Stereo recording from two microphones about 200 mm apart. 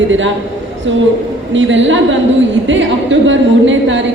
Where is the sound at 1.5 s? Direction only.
70° right (ahead or behind).